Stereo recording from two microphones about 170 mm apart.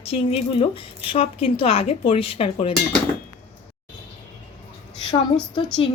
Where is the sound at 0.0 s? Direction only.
35° left (ahead or behind).